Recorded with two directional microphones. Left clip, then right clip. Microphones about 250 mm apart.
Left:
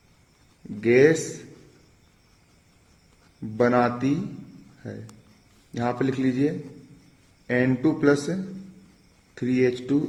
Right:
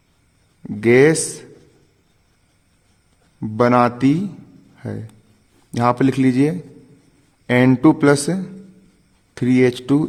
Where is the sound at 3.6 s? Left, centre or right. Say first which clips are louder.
Right 6 dB; right.